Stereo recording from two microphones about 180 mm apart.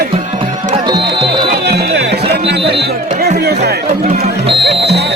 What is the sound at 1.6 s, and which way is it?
Music, 65° right (ahead or behind).